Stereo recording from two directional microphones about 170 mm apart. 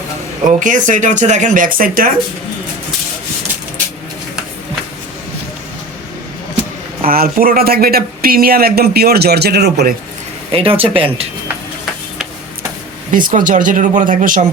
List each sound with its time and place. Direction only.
0.6 s speech: 50° right (ahead or behind)
7.0 s speech: 60° right (ahead or behind)
10.5 s speech: 35° right (ahead or behind)
13.1 s speech: 50° right (ahead or behind)